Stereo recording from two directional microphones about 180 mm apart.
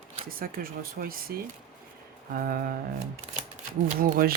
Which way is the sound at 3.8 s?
55° right (ahead or behind).